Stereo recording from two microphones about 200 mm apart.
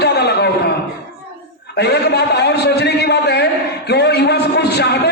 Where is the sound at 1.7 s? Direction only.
55° left (ahead or behind).